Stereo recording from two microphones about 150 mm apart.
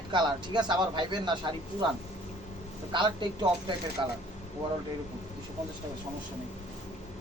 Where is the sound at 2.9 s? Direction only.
30° right (ahead or behind).